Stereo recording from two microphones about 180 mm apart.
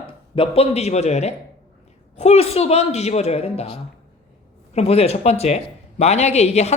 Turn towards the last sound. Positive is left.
turn(degrees=35)  # may be behind; listen again after turning